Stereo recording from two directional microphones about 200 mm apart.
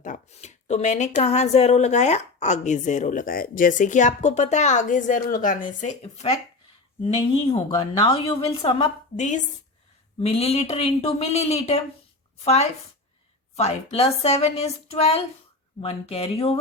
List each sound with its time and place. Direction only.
0.0 s a woman's voice: 35° left (ahead or behind)